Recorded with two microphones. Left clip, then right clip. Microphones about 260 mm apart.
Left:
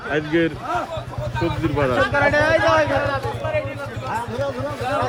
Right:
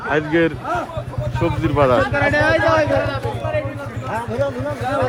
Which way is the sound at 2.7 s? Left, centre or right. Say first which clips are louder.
Right 1 dB; left.